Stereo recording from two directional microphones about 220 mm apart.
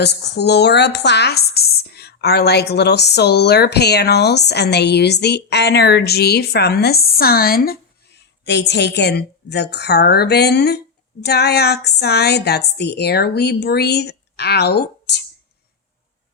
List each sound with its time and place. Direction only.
0.0 s a woman's voice: 50° left (ahead or behind)